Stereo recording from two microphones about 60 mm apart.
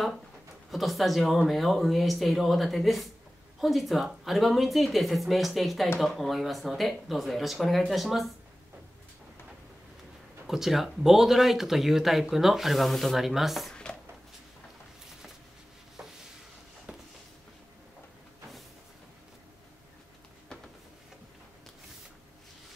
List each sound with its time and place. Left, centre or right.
0.7 s speech: centre
10.4 s speech: centre
16.0 s stir: centre
16.9 s a sound: right